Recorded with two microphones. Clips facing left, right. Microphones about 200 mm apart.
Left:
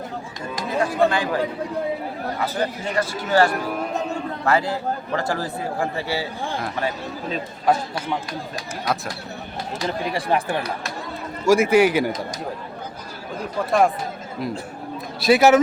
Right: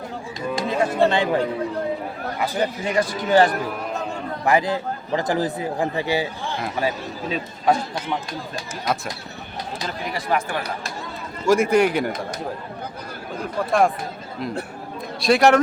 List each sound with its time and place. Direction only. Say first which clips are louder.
0.5 s speech: right 1 dB; 25° right (ahead or behind)
2.4 s a man's voice: right 3 dB; 15° right (ahead or behind)
6.6 s speech: right 4 dB; 5° right (ahead or behind)
7.6 s a man's voice: even; 5° left (ahead or behind)
9.8 s speech: left 5 dB; 30° left (ahead or behind)
11.4 s a man's voice: left 1 dB; 10° left (ahead or behind)
13.7 s a man's voice: left 1 dB; centre (ahead or behind)
15.2 s a man's voice: left 1 dB; 5° left (ahead or behind)